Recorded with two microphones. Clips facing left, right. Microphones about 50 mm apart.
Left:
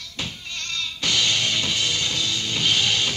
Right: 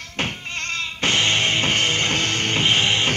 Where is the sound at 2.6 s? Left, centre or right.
Right.